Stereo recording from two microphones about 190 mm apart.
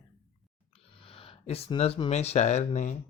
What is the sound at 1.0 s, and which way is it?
Speech, 30° left (ahead or behind).